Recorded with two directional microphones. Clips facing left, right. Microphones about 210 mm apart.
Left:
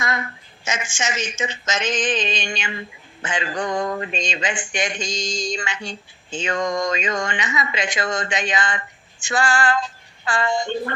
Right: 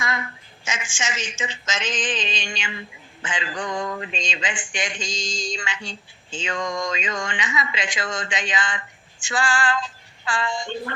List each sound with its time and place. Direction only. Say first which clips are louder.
0.0 s a woman's voice: left 2 dB; 40° left (ahead or behind)
9.3 s music: left 3 dB; 40° left (ahead or behind)